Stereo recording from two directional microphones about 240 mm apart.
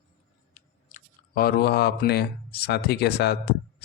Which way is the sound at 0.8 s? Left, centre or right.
Left.